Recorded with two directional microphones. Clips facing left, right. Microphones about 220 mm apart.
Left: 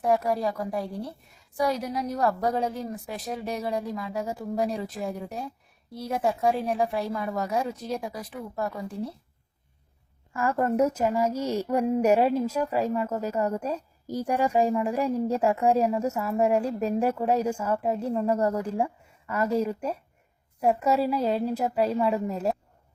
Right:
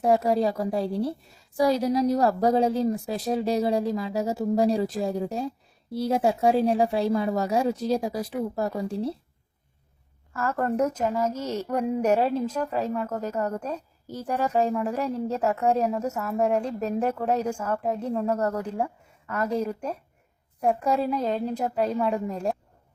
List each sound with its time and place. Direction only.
0.0 s a woman's voice: 25° right (ahead or behind)
10.3 s a woman's voice: 15° left (ahead or behind)